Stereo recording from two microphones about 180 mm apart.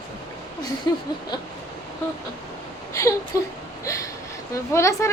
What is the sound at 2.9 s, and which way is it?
A woman's voice, 15° left (ahead or behind).